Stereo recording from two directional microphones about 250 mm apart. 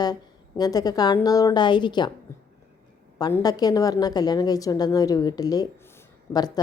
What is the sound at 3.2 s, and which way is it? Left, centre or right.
A woman's voice, centre.